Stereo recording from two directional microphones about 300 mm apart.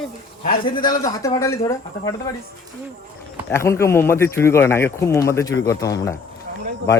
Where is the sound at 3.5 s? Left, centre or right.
Centre.